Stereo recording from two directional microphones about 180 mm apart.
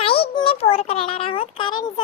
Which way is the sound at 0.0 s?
30° left (ahead or behind).